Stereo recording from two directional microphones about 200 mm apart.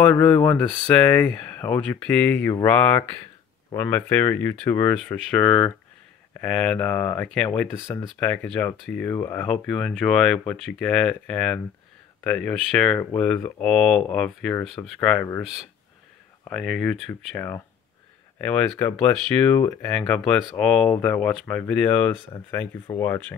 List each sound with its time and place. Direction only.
0.0 s speech: 5° left (ahead or behind)
16.4 s speech: centre (ahead or behind)
22.3 s speech: 15° left (ahead or behind)